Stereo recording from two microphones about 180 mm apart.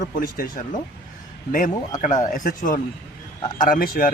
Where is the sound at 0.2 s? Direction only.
50° left (ahead or behind).